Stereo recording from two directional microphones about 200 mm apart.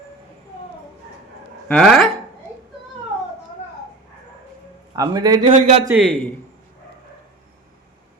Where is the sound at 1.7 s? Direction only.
Centre (ahead or behind).